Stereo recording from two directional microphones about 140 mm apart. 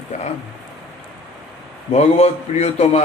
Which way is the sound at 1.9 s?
50° left (ahead or behind).